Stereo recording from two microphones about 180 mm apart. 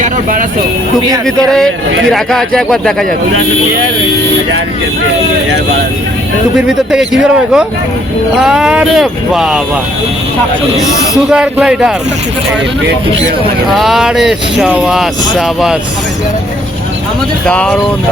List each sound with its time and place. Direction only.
0.0 s a sound: 45° right (ahead or behind)
1.5 s speech: centre (ahead or behind)
6.9 s speech: 5° right (ahead or behind)
10.8 s speech: 20° left (ahead or behind)
11.3 s speech: 5° right (ahead or behind)
13.7 s speech: centre (ahead or behind)
17.4 s speech: 5° left (ahead or behind)